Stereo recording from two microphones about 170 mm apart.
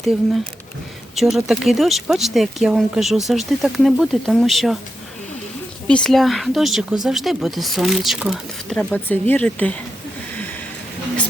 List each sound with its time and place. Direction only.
1.1 s speech: centre (ahead or behind)
5.9 s speech: 5° left (ahead or behind)